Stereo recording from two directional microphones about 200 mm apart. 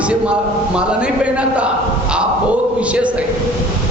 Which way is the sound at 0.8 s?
5° right (ahead or behind).